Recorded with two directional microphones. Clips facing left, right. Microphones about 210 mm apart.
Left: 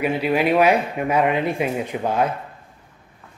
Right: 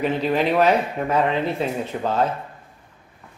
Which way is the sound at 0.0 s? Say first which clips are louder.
Left 1 dB; 10° left (ahead or behind).